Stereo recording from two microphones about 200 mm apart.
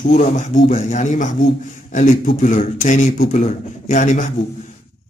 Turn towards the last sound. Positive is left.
turn(degrees=35)  # may be behind; listen again after turning